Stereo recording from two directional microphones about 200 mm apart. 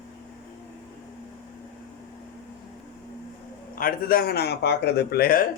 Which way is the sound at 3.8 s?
45° left (ahead or behind).